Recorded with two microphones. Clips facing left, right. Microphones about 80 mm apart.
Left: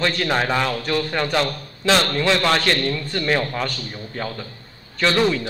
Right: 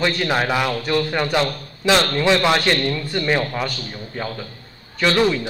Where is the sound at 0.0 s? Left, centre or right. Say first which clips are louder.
Right 1 dB; centre.